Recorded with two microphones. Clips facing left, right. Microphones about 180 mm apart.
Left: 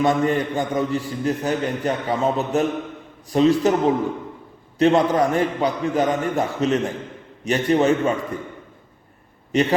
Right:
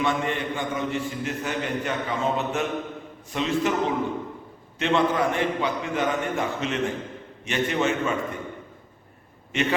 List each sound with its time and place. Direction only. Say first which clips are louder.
0.0 s a man's voice: left 7 dB; 40° left (ahead or behind)
9.5 s a man's voice: left 6 dB; 35° left (ahead or behind)